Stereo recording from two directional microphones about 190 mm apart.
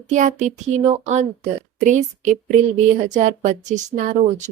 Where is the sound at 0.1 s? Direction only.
40° right (ahead or behind).